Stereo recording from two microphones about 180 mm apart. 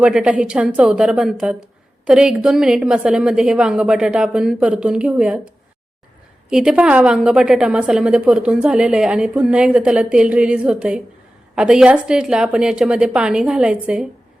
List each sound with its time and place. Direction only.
0.0 s a woman's voice: 5° right (ahead or behind)
6.5 s a woman's voice: 5° right (ahead or behind)